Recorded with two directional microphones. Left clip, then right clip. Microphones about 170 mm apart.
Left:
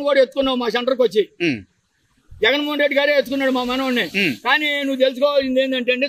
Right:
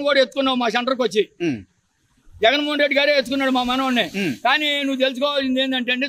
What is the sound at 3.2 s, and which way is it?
A man's voice, 20° right (ahead or behind).